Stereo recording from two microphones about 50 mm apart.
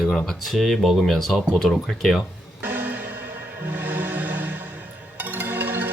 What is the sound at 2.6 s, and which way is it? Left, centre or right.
Music, right.